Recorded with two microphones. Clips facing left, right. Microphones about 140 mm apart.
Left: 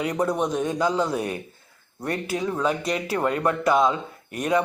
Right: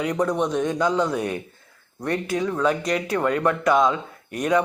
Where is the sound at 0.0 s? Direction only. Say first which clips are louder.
Right 1 dB; 30° left (ahead or behind).